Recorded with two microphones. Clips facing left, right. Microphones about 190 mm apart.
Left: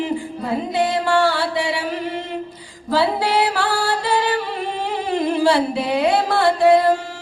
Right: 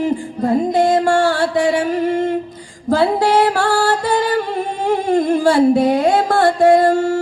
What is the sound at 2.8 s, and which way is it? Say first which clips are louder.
Music: right 5 dB; 45° right (ahead or behind).